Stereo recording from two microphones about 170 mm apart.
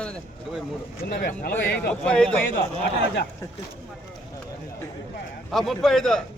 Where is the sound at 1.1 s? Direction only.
60° left (ahead or behind).